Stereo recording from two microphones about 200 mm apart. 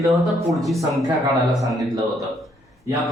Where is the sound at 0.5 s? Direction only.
Centre (ahead or behind).